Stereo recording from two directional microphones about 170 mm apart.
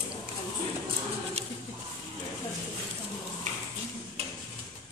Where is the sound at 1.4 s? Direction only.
40° right (ahead or behind).